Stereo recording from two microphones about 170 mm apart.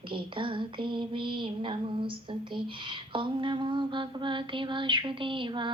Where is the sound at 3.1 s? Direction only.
30° right (ahead or behind).